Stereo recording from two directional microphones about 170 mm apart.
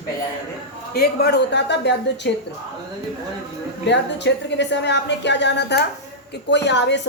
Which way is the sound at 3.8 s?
90° left.